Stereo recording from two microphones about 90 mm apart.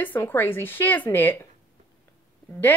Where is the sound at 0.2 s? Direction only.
25° left (ahead or behind).